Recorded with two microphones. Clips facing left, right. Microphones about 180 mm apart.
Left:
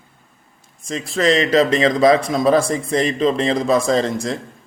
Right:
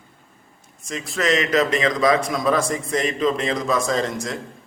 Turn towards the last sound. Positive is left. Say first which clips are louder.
# left 5 dB
turn(degrees=30)  # may be behind; listen again after turning